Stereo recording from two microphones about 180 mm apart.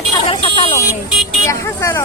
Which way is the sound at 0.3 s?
30° left (ahead or behind).